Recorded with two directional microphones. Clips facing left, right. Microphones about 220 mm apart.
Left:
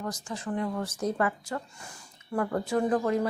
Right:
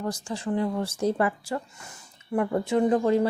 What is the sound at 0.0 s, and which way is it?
A woman's voice, 30° right (ahead or behind).